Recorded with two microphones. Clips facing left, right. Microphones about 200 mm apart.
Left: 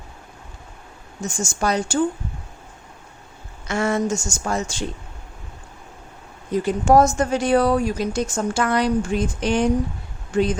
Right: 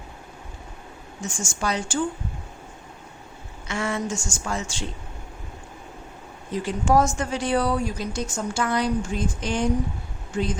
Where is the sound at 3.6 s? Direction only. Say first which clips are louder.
Left 6 dB; 45° left (ahead or behind).